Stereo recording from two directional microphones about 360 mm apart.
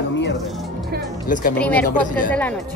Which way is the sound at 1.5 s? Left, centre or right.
Centre.